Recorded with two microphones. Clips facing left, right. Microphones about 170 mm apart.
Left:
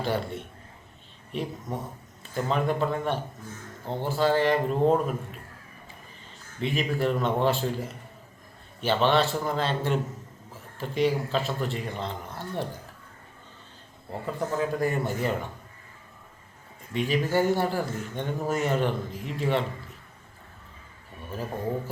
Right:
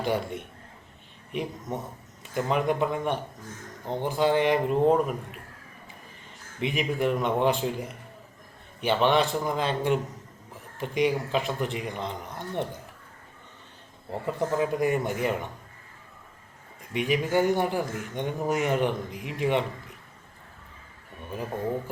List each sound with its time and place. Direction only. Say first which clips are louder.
0.0 s speech: right 1 dB; 15° right (ahead or behind)
6.6 s speech: even; 15° right (ahead or behind)
14.1 s speech: right 2 dB; 20° right (ahead or behind)
16.9 s speech: even; 15° right (ahead or behind)